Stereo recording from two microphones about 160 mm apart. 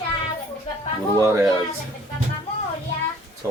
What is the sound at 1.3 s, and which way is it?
Speech, 15° right (ahead or behind).